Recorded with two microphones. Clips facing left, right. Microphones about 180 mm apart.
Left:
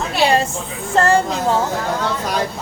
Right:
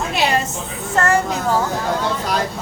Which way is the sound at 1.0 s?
30° left (ahead or behind).